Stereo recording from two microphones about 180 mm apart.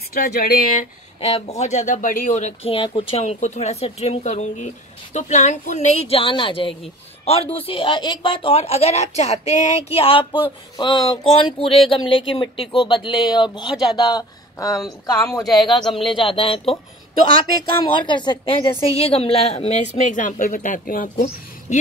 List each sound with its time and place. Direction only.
0.1 s speech: 55° left (ahead or behind)
1.6 s speech: 40° left (ahead or behind); by 15.4 s 20° left (ahead or behind)
15.5 s speech: centre (ahead or behind)
16.1 s speech: 30° left (ahead or behind)
17.9 s speech: 25° left (ahead or behind); by 21.7 s 50° left (ahead or behind)